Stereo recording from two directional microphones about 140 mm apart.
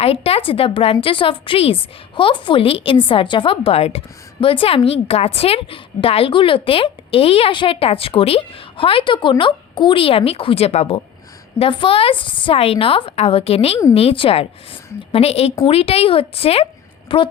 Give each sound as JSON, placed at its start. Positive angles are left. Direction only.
{"t": 0.0, "sound": "a woman's voice", "side_deg": 45}